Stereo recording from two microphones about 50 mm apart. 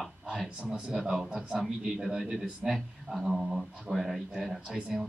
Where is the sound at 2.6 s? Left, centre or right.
Centre.